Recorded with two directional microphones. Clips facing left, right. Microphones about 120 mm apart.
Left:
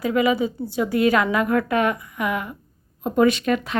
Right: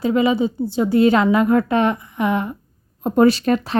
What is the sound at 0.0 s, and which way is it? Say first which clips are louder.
A woman's voice: right 3 dB; 25° right (ahead or behind).